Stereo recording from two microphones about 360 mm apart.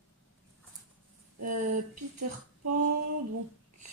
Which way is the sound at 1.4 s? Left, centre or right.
Right.